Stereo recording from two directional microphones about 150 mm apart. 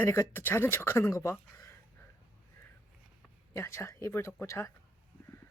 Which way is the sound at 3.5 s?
20° left (ahead or behind).